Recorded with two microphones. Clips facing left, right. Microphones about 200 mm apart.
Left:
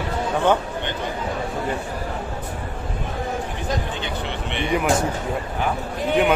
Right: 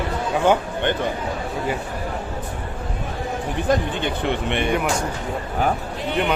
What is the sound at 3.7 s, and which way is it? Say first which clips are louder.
Speech: right 7 dB; 55° right (ahead or behind).